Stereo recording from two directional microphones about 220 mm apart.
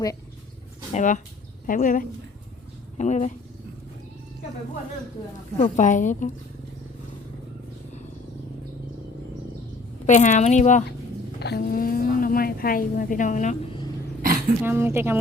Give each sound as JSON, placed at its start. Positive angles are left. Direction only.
{"t": 0.9, "sound": "speech", "side_deg": 35}
{"t": 5.5, "sound": "speech", "side_deg": 30}
{"t": 10.1, "sound": "speech", "side_deg": 35}
{"t": 11.3, "sound": "speech", "side_deg": 50}
{"t": 14.6, "sound": "speech", "side_deg": -10}